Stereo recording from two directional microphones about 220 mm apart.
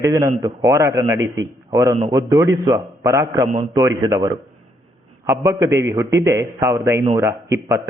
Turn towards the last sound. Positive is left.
turn(degrees=-10)  # may be behind; listen again after turning